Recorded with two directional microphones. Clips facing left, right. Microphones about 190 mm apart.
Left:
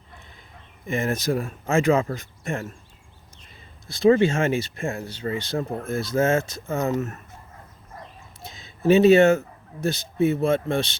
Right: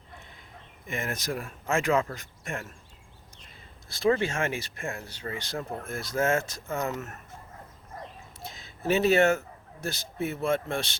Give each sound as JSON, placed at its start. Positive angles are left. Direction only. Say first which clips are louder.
{"t": 0.9, "sound": "speech", "louder": "left 8 dB", "side_deg": 30}
{"t": 3.8, "sound": "speech", "louder": "left 8 dB", "side_deg": 20}
{"t": 8.4, "sound": "a sound", "louder": "left 9 dB", "side_deg": 20}
{"t": 9.8, "sound": "speech", "louder": "left 10 dB", "side_deg": 20}